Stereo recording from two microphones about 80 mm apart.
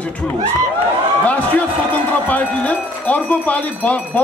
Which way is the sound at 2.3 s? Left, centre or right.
Centre.